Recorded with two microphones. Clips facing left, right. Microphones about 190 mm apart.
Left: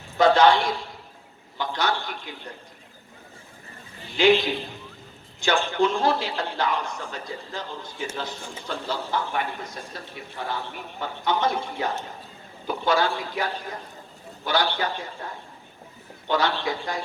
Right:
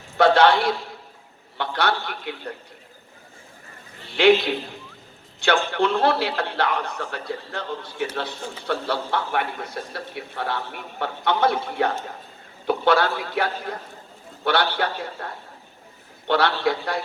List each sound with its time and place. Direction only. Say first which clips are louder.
0.2 s a man's voice: right 1 dB; 65° right (ahead or behind)
4.0 s a man's voice: right 2 dB; 65° right (ahead or behind)